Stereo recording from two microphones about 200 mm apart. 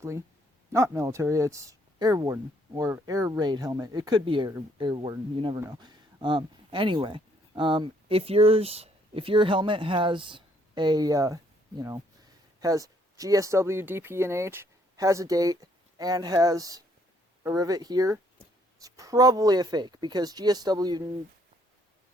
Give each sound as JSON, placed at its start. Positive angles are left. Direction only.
{"t": 0.7, "sound": "speech", "side_deg": -15}